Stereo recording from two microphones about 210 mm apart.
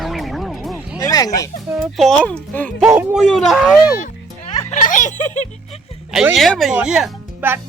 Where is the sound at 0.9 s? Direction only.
15° left (ahead or behind).